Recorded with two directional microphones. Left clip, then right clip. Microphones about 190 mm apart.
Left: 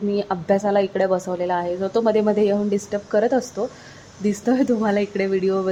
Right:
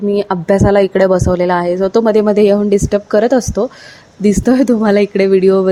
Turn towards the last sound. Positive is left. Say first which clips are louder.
# right 11 dB
turn(degrees=-35)  # may be behind; listen again after turning